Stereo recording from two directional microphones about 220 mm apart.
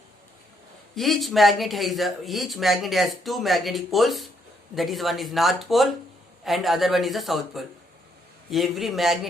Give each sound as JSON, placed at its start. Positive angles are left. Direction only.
{"t": 0.9, "sound": "speech", "side_deg": 0}